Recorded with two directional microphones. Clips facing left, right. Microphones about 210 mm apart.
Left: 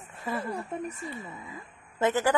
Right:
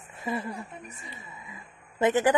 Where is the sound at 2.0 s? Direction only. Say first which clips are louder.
Right 3 dB; 15° right (ahead or behind).